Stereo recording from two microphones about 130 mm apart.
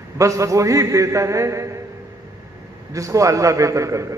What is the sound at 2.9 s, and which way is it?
A man's voice, 25° right (ahead or behind).